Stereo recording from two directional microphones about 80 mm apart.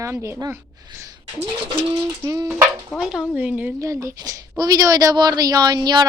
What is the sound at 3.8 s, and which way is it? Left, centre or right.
A woman's voice, right.